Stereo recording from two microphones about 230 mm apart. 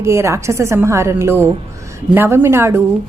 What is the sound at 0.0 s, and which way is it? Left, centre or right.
A woman's voice, centre.